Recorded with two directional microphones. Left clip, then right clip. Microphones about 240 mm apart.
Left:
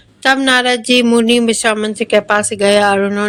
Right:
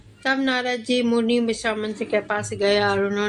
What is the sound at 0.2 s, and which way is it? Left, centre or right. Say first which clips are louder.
Speech: left 11 dB; left.